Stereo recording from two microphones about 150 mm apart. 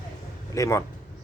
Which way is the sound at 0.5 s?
20° left (ahead or behind).